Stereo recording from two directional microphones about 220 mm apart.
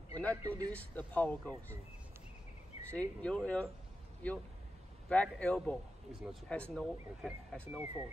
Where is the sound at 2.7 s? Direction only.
25° left (ahead or behind).